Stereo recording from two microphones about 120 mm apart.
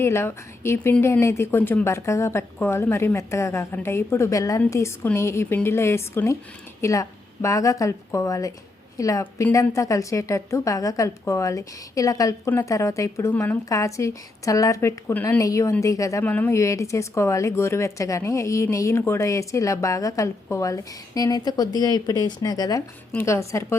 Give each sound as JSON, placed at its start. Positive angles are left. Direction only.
{"t": 0.0, "sound": "speech", "side_deg": 20}
{"t": 13.3, "sound": "speech", "side_deg": 15}
{"t": 13.7, "sound": "speech", "side_deg": 25}
{"t": 16.2, "sound": "speech", "side_deg": 15}